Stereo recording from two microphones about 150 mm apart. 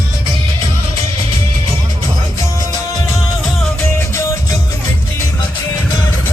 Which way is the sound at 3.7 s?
20° left (ahead or behind).